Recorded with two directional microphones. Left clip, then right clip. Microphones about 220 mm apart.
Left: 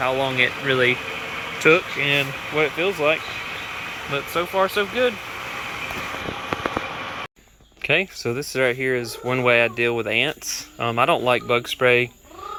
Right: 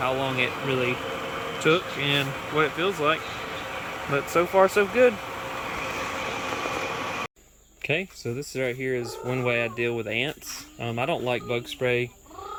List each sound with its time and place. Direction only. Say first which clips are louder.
0.0 s speech: left 5 dB; 5° right (ahead or behind)
4.1 s speech: right 1 dB; 20° right (ahead or behind)
7.8 s speech: left 7 dB; 5° right (ahead or behind)